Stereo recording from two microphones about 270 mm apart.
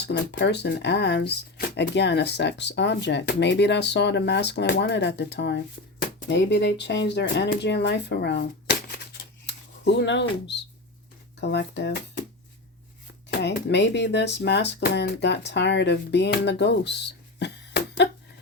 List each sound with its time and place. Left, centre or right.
0.0 s speech: left
13.3 s speech: left